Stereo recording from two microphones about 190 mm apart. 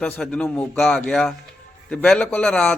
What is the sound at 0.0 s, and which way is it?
A man's voice, 5° left (ahead or behind).